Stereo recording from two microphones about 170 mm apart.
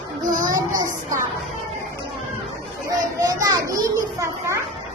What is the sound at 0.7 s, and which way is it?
Speech, 20° right (ahead or behind).